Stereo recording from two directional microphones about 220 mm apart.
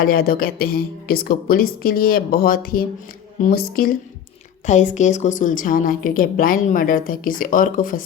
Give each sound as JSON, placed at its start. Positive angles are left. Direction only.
{"t": 0.0, "sound": "a woman's voice", "side_deg": 40}